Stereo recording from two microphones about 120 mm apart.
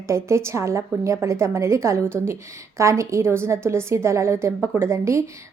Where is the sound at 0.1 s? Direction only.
25° right (ahead or behind).